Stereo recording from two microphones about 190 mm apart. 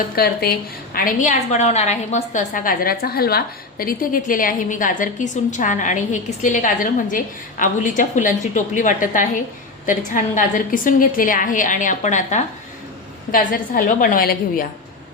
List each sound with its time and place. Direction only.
0.2 s a woman's voice: 55° left (ahead or behind)